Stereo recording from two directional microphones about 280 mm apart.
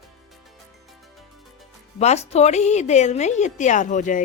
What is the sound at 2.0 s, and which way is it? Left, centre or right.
A woman's voice, left.